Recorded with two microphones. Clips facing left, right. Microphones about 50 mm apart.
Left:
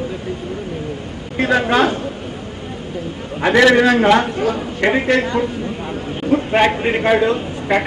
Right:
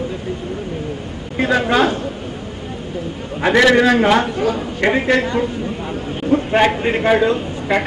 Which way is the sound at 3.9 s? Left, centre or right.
Centre.